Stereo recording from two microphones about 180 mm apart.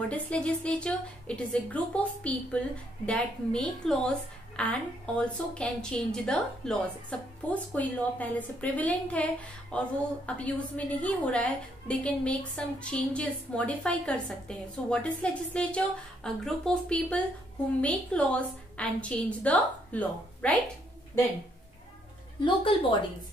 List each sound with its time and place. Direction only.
0.1 s a woman's voice: 5° left (ahead or behind)
22.4 s a woman's voice: 30° left (ahead or behind)